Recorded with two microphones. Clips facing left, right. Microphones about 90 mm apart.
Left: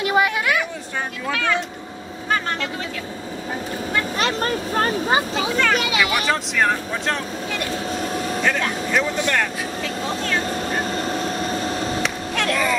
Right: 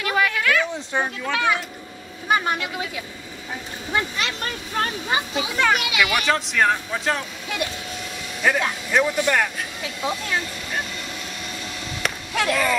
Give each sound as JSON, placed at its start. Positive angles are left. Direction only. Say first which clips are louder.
{"t": 0.0, "sound": "a sound", "louder": "left 3 dB", "side_deg": 20}
{"t": 1.3, "sound": "speech", "louder": "left 1 dB", "side_deg": -15}
{"t": 4.2, "sound": "speech", "louder": "left 6 dB", "side_deg": 35}
{"t": 6.2, "sound": "speech", "louder": "even", "side_deg": 0}
{"t": 7.9, "sound": "vehicle", "louder": "left 9 dB", "side_deg": 40}
{"t": 8.5, "sound": "speech", "louder": "right 3 dB", "side_deg": -10}
{"t": 10.4, "sound": "vehicle", "louder": "left 6 dB", "side_deg": 40}
{"t": 12.0, "sound": "a sound", "louder": "left 2 dB", "side_deg": -5}